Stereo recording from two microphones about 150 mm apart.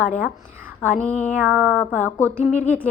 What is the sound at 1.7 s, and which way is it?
Speech, 10° left (ahead or behind).